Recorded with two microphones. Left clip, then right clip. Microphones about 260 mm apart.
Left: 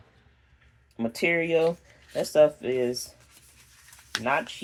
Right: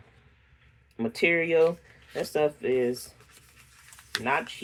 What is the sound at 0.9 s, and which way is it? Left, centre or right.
Speech, left.